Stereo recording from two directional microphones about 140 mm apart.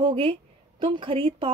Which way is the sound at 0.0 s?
40° right (ahead or behind).